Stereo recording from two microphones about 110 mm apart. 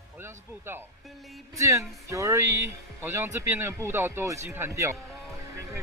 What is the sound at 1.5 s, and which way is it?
Music, 30° right (ahead or behind).